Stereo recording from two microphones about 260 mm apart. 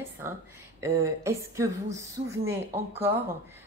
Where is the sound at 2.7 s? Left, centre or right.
Right.